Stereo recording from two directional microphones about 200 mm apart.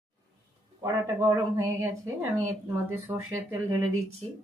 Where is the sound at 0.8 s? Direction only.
15° right (ahead or behind).